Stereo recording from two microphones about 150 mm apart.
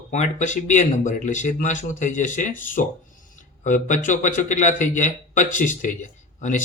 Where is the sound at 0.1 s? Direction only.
50° left (ahead or behind).